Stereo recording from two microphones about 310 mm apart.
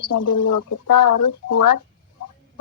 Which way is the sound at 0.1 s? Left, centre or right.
Left.